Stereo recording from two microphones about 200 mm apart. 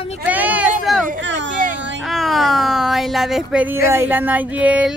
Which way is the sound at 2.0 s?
Centre (ahead or behind).